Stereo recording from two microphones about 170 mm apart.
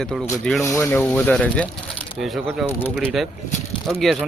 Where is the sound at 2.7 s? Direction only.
15° left (ahead or behind).